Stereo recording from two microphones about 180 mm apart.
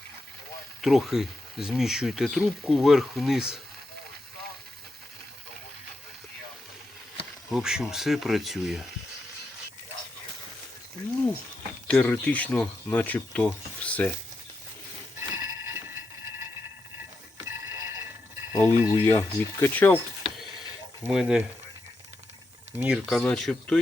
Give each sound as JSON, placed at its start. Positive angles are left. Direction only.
{"t": 0.8, "sound": "speech", "side_deg": 0}
{"t": 7.5, "sound": "speech", "side_deg": -5}
{"t": 11.9, "sound": "speech", "side_deg": 10}
{"t": 15.2, "sound": "a sound", "side_deg": -20}
{"t": 17.3, "sound": "clock", "side_deg": -15}
{"t": 18.6, "sound": "speech", "side_deg": -15}
{"t": 19.0, "sound": "speech", "side_deg": 15}
{"t": 21.0, "sound": "speech", "side_deg": -5}
{"t": 22.8, "sound": "speech", "side_deg": 0}